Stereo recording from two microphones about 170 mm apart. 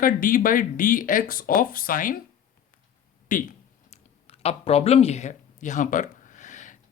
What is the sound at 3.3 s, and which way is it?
Speech, 50° left (ahead or behind).